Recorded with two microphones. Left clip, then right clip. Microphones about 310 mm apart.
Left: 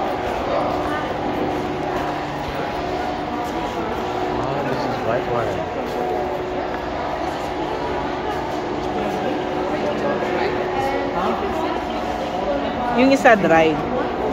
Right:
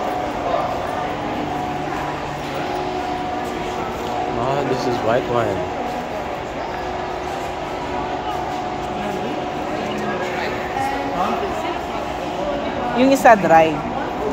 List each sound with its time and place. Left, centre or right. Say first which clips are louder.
12.9 s a woman's voice: right 2 dB; right